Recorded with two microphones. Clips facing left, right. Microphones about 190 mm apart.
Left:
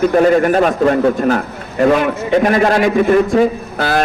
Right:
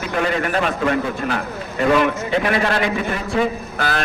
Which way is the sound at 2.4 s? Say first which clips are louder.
Left 7 dB; 45° left (ahead or behind).